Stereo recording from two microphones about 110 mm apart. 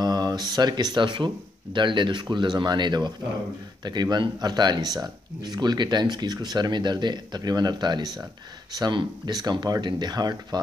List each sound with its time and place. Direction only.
0.0 s speech: 40° right (ahead or behind)